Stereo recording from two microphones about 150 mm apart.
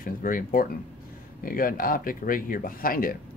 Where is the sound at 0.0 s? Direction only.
65° left (ahead or behind).